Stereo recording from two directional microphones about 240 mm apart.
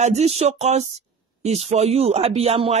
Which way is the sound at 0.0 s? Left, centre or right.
Right.